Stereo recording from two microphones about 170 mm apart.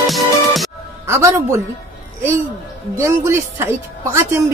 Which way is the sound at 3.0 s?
15° right (ahead or behind).